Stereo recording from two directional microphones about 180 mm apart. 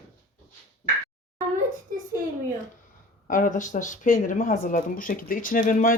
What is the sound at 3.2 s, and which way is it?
Speech, 45° left (ahead or behind).